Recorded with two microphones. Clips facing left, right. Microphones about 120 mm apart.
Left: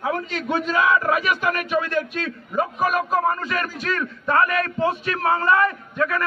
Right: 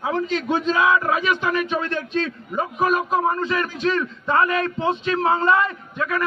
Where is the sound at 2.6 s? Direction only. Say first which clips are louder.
Right 1 dB; 5° left (ahead or behind).